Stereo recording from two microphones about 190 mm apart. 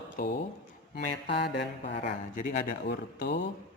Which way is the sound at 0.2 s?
55° left (ahead or behind).